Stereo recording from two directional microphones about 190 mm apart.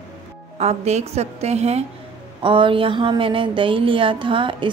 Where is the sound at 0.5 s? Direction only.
35° right (ahead or behind).